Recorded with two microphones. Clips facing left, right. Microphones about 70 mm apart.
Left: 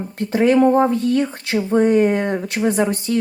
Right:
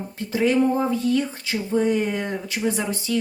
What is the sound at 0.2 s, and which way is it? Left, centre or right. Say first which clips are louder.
Speech: left 6 dB; left.